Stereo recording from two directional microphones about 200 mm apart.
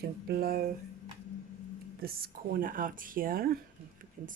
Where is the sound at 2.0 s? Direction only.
50° right (ahead or behind).